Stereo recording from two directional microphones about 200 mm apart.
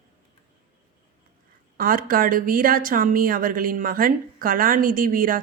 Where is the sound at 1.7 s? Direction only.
45° right (ahead or behind).